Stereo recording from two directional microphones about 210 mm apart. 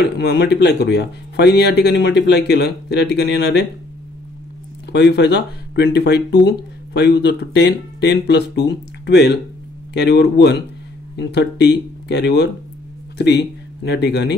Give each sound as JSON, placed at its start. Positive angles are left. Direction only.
{"t": 0.2, "sound": "speech", "side_deg": 50}
{"t": 4.9, "sound": "speech", "side_deg": 55}